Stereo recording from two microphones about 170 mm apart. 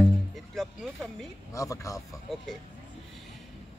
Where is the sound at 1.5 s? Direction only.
20° left (ahead or behind).